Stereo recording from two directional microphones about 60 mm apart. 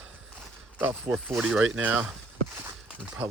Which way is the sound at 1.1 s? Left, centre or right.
Right.